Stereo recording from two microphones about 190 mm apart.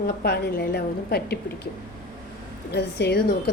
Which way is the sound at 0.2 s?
60° left (ahead or behind).